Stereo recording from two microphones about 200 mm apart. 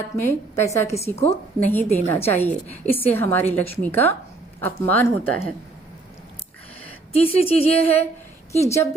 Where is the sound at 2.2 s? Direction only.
10° left (ahead or behind).